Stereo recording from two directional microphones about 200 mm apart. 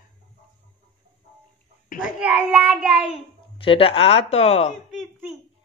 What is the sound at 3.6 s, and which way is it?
Speech, 25° left (ahead or behind).